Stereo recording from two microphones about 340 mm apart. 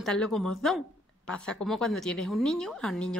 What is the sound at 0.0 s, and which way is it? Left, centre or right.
A woman's voice, centre.